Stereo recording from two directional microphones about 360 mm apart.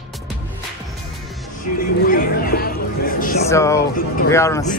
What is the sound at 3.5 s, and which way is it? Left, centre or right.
Music, centre.